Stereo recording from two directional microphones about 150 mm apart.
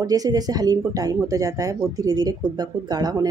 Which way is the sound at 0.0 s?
25° right (ahead or behind).